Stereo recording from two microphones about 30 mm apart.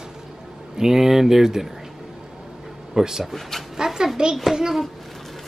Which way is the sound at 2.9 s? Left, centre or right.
Centre.